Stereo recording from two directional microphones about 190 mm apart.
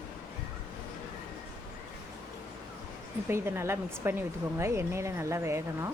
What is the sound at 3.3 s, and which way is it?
A woman's voice, 15° right (ahead or behind).